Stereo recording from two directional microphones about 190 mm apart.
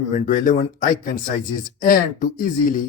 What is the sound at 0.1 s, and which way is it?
Speech, 45° left (ahead or behind).